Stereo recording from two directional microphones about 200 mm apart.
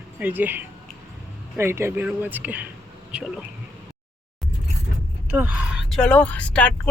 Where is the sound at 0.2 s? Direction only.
10° right (ahead or behind).